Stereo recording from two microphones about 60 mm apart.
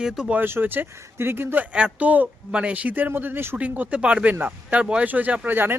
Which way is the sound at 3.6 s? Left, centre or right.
Right.